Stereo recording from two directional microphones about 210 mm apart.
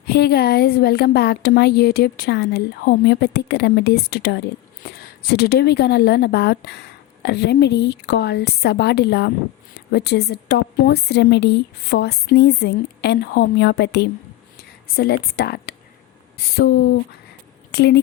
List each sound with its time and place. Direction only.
0.0 s a woman's voice: 50° left (ahead or behind)